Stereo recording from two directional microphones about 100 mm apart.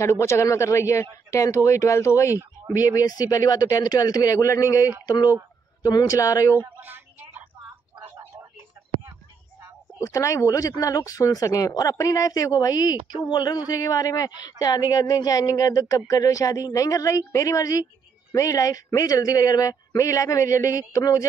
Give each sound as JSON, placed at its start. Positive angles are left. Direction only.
{"t": 0.0, "sound": "a man's voice", "side_deg": 30}
{"t": 6.5, "sound": "a sound", "side_deg": -20}
{"t": 9.9, "sound": "speech", "side_deg": 35}